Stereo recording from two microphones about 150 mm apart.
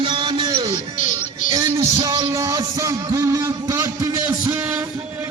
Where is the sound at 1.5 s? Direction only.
25° right (ahead or behind).